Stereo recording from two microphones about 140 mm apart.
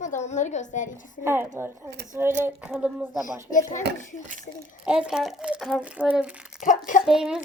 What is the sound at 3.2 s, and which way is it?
Speech, 70° left (ahead or behind).